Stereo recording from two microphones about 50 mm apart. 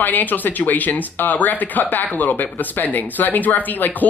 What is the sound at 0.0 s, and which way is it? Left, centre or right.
Speech, left.